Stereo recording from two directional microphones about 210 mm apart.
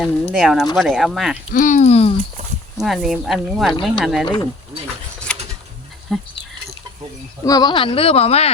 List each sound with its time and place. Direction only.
0.0 s speech: centre (ahead or behind)
1.5 s speech: 35° left (ahead or behind)
2.7 s speech: centre (ahead or behind)
5.3 s a sound: 5° left (ahead or behind)
6.1 s speech: centre (ahead or behind)
7.4 s speech: 20° left (ahead or behind)